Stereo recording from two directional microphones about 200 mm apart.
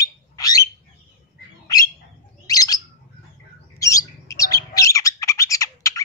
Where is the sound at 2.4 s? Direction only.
20° left (ahead or behind).